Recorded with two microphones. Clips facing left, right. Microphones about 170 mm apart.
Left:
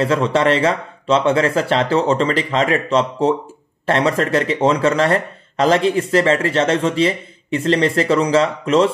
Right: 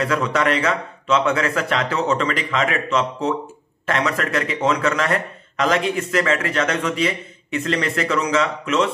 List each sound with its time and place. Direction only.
0.0 s speech: 30° left (ahead or behind)